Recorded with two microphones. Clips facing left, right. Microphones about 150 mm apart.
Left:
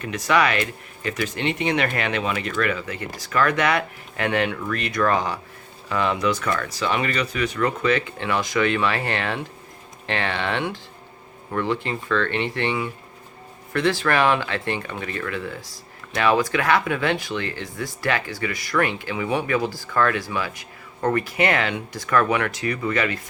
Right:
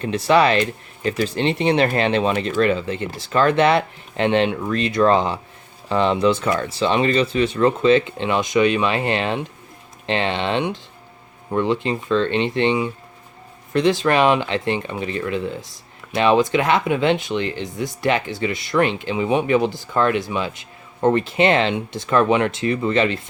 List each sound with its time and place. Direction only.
0.0 s speech: 30° right (ahead or behind)